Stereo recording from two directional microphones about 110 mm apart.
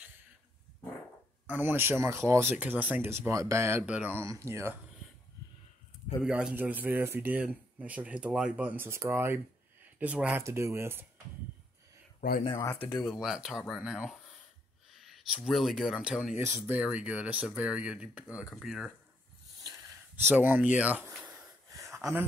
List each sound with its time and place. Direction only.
1.5 s speech: 20° right (ahead or behind)
3.8 s speech: 15° right (ahead or behind)
6.2 s speech: 10° right (ahead or behind)
10.4 s speech: 25° right (ahead or behind)
12.7 s speech: 20° left (ahead or behind)
13.0 s speech: centre (ahead or behind)
16.3 s speech: 20° right (ahead or behind); by 18.9 s 5° right (ahead or behind)
19.6 s a sound: 35° right (ahead or behind)
20.2 s speech: 15° right (ahead or behind)
21.7 s a sound: 25° right (ahead or behind)